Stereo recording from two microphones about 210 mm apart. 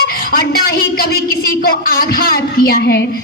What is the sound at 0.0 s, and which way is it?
A woman's voice, 45° left (ahead or behind).